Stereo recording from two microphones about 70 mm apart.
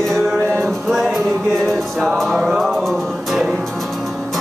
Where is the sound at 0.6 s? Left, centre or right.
Centre.